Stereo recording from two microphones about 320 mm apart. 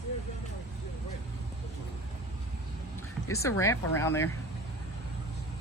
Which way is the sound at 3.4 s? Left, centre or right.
Centre.